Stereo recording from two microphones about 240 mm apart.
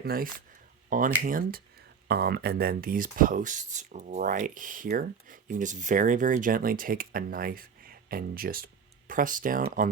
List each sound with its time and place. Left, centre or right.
0.0 s speech: right